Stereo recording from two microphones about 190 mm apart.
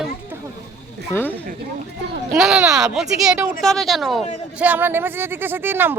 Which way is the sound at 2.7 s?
Centre (ahead or behind).